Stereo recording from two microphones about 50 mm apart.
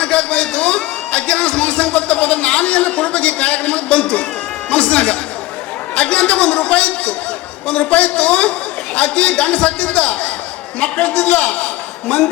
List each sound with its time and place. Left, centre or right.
0.0 s a man's voice: left